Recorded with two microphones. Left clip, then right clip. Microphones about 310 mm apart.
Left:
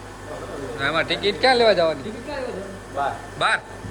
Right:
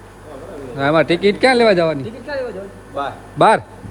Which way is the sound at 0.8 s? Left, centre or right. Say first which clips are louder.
Right 8 dB; centre.